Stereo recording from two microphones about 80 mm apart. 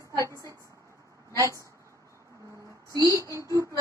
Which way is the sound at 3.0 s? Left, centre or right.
Right.